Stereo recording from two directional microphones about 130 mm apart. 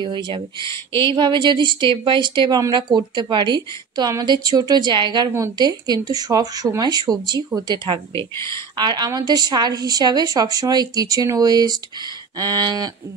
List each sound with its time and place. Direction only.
0.0 s a woman's voice: 35° right (ahead or behind)